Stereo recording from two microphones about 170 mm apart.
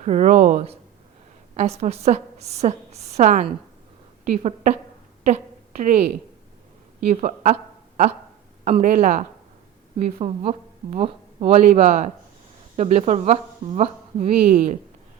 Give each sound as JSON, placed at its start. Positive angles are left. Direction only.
{"t": 0.0, "sound": "a woman's voice", "side_deg": -45}
{"t": 8.6, "sound": "a woman's voice", "side_deg": -45}